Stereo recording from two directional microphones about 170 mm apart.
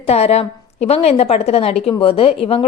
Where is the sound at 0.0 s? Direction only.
35° left (ahead or behind).